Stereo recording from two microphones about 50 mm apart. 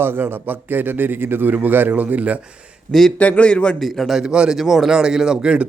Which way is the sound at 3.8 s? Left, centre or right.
Centre.